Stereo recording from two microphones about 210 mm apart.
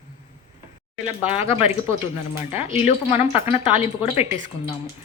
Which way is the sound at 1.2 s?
30° left (ahead or behind).